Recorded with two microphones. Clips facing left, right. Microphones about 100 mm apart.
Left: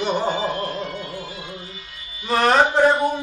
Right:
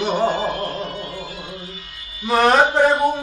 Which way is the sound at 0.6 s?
40° right (ahead or behind).